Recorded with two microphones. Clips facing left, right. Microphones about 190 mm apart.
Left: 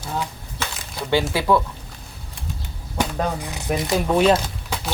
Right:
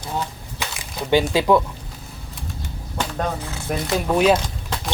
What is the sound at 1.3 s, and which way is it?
Speech, 20° right (ahead or behind).